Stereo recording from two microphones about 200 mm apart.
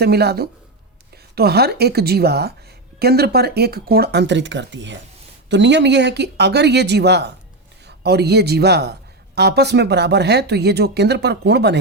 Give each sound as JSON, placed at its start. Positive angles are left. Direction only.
{"t": 0.0, "sound": "a woman's voice", "side_deg": -55}